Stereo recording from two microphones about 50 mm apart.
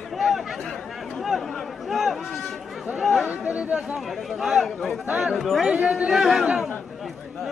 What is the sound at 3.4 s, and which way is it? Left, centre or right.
Chatter, right.